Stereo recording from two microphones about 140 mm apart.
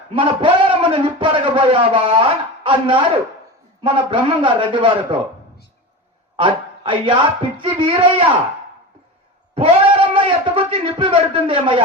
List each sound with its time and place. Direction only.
0.1 s a man's voice: 40° right (ahead or behind)
6.3 s speech: 35° right (ahead or behind)
9.6 s a man's voice: 35° right (ahead or behind)